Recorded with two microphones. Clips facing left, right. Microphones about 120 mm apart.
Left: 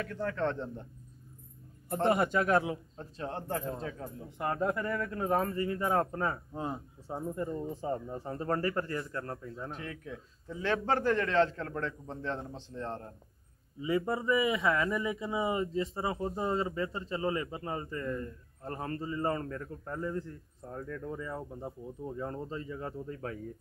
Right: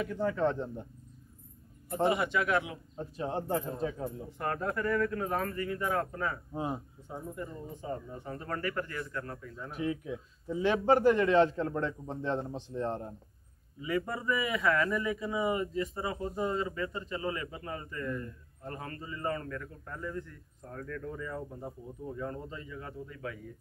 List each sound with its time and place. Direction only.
0.0 s a man's voice: 10° right (ahead or behind)
2.0 s speech: 45° left (ahead or behind)
3.0 s a man's voice: 15° right (ahead or behind)
4.4 s speech: 15° left (ahead or behind); by 6.4 s 35° left (ahead or behind)
6.5 s a man's voice: 10° right (ahead or behind)
7.1 s speech: 35° left (ahead or behind)
9.7 s a man's voice: 15° right (ahead or behind)
13.7 s speech: 25° left (ahead or behind)